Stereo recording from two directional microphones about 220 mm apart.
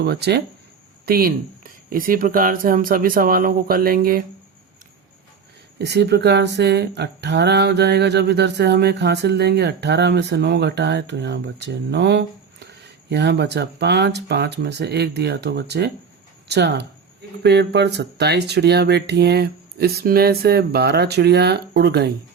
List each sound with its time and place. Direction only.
0.0 s speech: 50° right (ahead or behind)
5.8 s speech: 50° right (ahead or behind)